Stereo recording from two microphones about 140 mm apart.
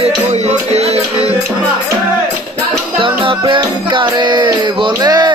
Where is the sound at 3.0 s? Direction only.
35° right (ahead or behind).